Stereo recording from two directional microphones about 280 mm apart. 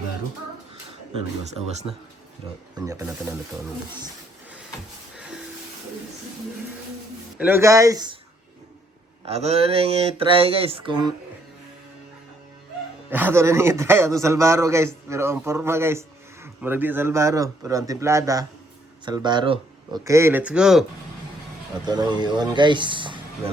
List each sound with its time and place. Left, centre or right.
2.7 s a man's voice: centre
7.3 s a man's voice: centre
9.2 s speech: right
13.1 s a man's voice: centre
21.8 s a man's voice: centre